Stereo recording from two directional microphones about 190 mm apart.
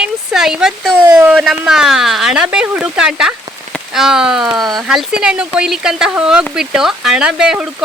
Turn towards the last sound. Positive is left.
turn(degrees=-5)  # may be behind; listen again after turning